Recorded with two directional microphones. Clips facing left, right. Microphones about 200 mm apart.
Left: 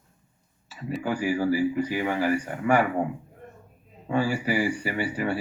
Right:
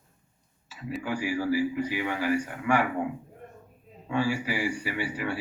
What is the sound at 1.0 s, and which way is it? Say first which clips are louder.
Speech: left 4 dB; 45° left (ahead or behind).